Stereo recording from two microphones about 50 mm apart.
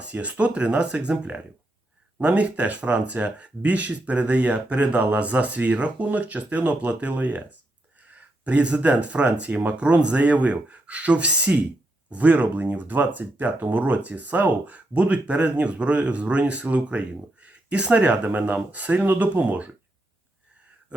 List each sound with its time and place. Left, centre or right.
0.0 s speech: right